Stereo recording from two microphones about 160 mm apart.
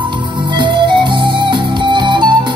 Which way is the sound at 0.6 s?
30° right (ahead or behind).